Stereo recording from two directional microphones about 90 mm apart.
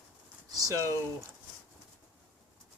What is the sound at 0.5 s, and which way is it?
Speech, 40° right (ahead or behind).